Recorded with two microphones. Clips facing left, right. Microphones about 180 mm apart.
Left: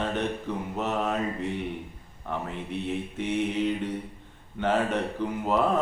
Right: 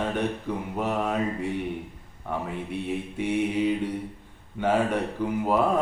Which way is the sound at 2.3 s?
10° right (ahead or behind).